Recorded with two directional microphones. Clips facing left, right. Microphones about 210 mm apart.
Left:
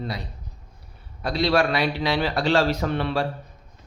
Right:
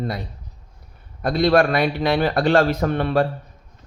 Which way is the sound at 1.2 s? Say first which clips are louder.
Right 5 dB; 50° right (ahead or behind).